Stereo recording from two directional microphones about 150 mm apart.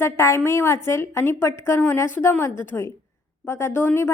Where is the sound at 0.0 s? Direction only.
20° left (ahead or behind).